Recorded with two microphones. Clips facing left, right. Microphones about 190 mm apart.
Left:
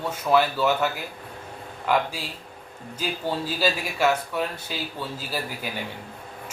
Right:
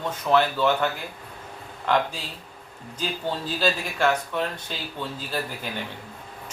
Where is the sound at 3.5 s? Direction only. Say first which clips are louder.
Right 3 dB; 10° left (ahead or behind).